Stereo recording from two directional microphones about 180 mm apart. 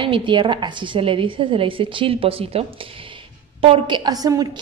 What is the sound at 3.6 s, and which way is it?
Speech, 30° right (ahead or behind).